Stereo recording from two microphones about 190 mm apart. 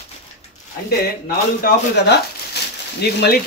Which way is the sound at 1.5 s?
60° left (ahead or behind).